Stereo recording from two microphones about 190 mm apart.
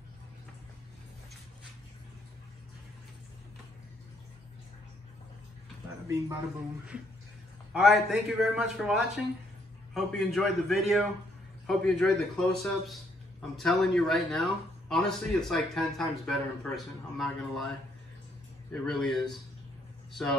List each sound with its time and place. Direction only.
6.0 s a man's voice: 15° right (ahead or behind)
7.7 s a man's voice: centre (ahead or behind)
18.7 s a man's voice: centre (ahead or behind)